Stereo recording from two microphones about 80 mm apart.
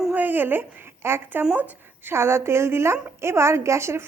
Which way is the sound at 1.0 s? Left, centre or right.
Right.